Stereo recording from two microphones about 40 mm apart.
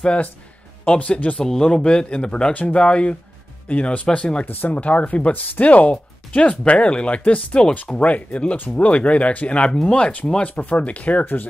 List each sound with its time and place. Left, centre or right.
0.8 s speech: left
1.4 s speech: centre
2.5 s speech: left
2.8 s speech: left
4.5 s speech: left
4.7 s speech: left
9.7 s speech: centre
9.9 s speech: left
10.4 s speech: left
10.7 s speech: left